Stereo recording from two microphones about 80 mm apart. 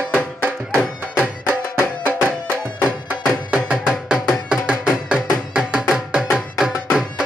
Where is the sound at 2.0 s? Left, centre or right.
Right.